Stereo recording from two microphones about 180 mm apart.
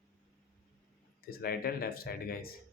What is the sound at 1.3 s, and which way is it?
Speech, 55° left (ahead or behind).